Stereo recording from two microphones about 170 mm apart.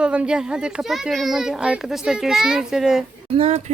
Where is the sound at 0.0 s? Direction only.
5° right (ahead or behind).